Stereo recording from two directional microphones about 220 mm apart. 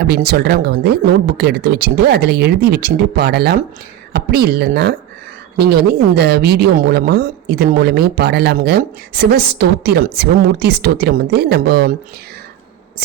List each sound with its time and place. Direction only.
0.0 s a woman's voice: 45° right (ahead or behind)